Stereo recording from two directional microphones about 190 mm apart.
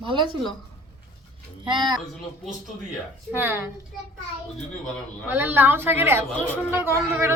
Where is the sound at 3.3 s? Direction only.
10° right (ahead or behind).